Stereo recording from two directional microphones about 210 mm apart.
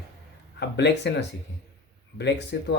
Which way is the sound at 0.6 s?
55° left (ahead or behind).